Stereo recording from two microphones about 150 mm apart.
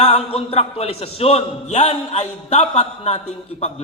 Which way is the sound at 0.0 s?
40° left (ahead or behind).